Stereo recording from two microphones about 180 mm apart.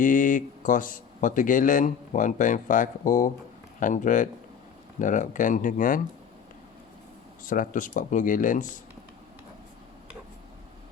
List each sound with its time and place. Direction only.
0.0 s speech: 45° left (ahead or behind)
7.4 s speech: 50° left (ahead or behind)